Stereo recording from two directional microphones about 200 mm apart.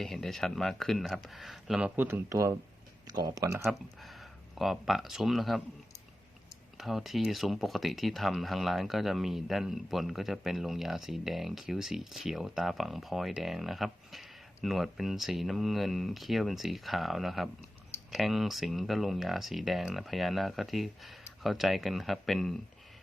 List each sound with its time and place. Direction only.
0.0 s speech: centre (ahead or behind); by 3.7 s 15° right (ahead or behind)
3.7 s speech: centre (ahead or behind)
6.7 s speech: centre (ahead or behind)